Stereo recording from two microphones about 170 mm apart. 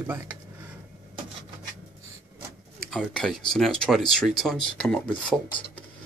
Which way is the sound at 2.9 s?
Centre (ahead or behind).